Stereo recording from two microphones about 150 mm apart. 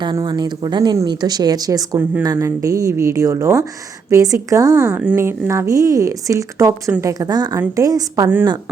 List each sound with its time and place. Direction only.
0.0 s speech: 30° right (ahead or behind)